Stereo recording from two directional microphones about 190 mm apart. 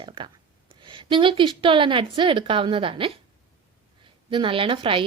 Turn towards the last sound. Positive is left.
turn(degrees=-25)  # may be behind; listen again after turning